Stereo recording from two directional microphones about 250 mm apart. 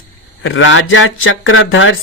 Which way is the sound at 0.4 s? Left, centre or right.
Left.